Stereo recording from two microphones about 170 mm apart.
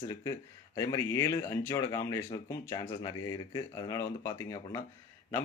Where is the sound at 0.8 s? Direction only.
20° left (ahead or behind).